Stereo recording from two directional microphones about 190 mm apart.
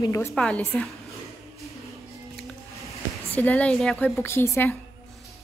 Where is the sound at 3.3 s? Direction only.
10° left (ahead or behind).